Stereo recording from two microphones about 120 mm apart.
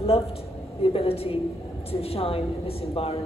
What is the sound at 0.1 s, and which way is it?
A man's voice, 55° left (ahead or behind).